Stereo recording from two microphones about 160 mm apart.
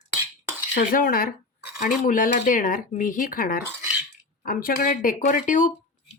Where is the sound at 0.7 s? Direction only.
60° left (ahead or behind).